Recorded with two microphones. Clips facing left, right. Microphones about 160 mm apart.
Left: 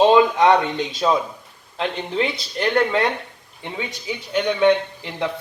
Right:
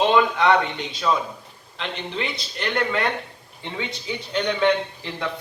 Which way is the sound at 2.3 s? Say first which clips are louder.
Left 6 dB; 45° left (ahead or behind).